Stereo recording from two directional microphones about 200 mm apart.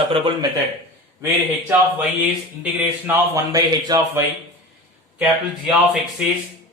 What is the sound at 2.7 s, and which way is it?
Speech, 10° right (ahead or behind).